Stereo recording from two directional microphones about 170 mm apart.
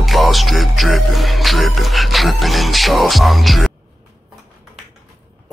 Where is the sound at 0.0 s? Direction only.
Centre (ahead or behind).